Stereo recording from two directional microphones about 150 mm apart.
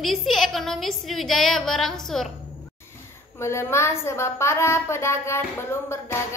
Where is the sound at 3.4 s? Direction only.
20° left (ahead or behind).